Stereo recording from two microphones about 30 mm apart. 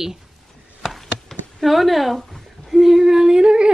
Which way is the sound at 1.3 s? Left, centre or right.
Centre.